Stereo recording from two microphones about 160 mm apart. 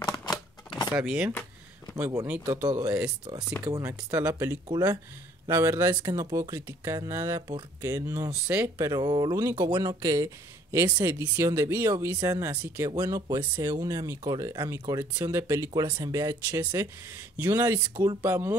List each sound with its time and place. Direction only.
0.0 s shuffling cards: 25° left (ahead or behind)
0.9 s speech: 5° right (ahead or behind)
2.6 s speech: 25° right (ahead or behind)
12.9 s speech: 25° right (ahead or behind)